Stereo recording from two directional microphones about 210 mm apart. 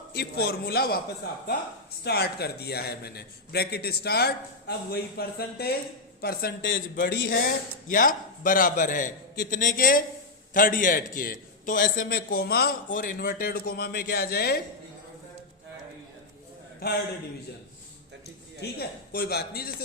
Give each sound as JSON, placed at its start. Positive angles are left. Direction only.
{"t": 0.1, "sound": "a man's voice", "side_deg": 50}
{"t": 2.0, "sound": "a man's voice", "side_deg": 50}
{"t": 18.6, "sound": "a man's voice", "side_deg": 50}